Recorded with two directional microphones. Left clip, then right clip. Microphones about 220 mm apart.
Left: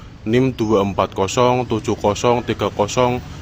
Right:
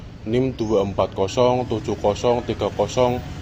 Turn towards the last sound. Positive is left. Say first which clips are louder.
# left 2 dB
turn(degrees=40)  # may be behind; listen again after turning